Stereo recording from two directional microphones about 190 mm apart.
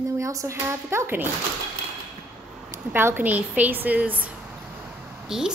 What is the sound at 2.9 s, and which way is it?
A woman's voice, 10° right (ahead or behind).